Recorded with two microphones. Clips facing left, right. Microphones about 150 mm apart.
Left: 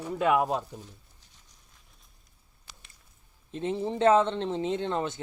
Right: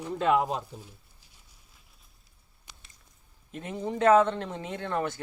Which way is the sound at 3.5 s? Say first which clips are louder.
Left 3 dB; 25° left (ahead or behind).